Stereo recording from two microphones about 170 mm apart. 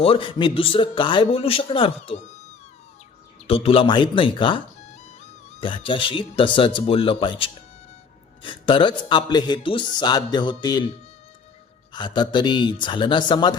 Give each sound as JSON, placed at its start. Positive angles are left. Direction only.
{"t": 0.0, "sound": "a man's voice", "side_deg": 30}
{"t": 3.4, "sound": "a man's voice", "side_deg": 35}
{"t": 11.9, "sound": "a man's voice", "side_deg": 25}